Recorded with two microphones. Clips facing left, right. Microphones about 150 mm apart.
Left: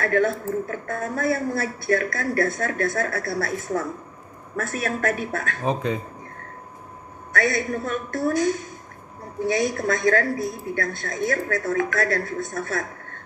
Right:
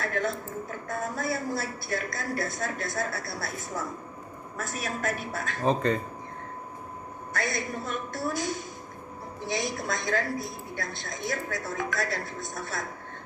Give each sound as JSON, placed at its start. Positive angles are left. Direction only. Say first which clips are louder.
{"t": 0.0, "sound": "a woman's voice", "louder": "left 8 dB", "side_deg": 55}
{"t": 5.6, "sound": "a man's voice", "louder": "right 1 dB", "side_deg": 10}
{"t": 7.4, "sound": "a woman's voice", "louder": "left 8 dB", "side_deg": 60}
{"t": 9.6, "sound": "a woman's voice", "louder": "left 7 dB", "side_deg": 50}